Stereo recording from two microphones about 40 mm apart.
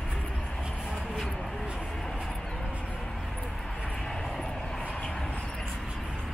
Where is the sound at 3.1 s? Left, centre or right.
Centre.